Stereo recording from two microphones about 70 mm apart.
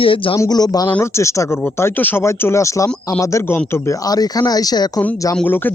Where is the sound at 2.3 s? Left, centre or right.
Left.